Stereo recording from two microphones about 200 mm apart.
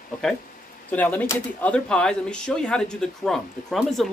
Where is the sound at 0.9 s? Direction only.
10° left (ahead or behind).